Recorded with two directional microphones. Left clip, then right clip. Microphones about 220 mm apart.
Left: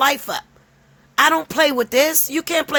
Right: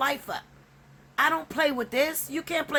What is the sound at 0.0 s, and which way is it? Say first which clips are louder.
Speech: left 10 dB; 45° left (ahead or behind).